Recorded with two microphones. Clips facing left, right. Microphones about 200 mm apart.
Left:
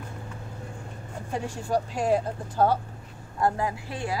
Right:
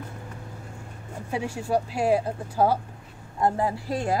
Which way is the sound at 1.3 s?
10° right (ahead or behind).